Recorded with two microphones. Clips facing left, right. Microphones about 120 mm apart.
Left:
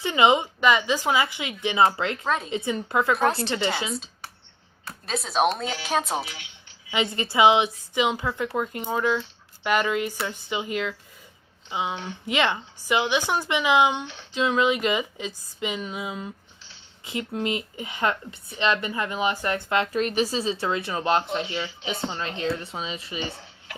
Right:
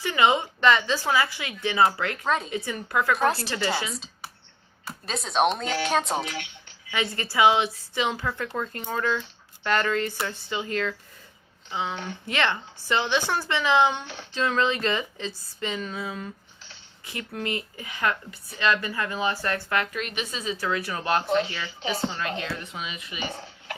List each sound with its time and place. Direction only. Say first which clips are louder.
0.0 s speech: left 2 dB; 20° left (ahead or behind)
2.2 s speech: right 3 dB; centre (ahead or behind)
2.5 s speech: left 3 dB; 25° left (ahead or behind)
3.9 s a sound: left 4 dB; centre (ahead or behind)
4.9 s speech: left 2 dB; centre (ahead or behind)
6.2 s speech: right 7 dB; 55° right (ahead or behind)
6.9 s speech: left 2 dB; 20° left (ahead or behind)
20.0 s speech: left 8 dB; 35° left (ahead or behind)